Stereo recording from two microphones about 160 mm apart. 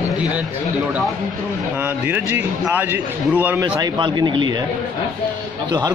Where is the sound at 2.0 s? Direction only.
10° right (ahead or behind).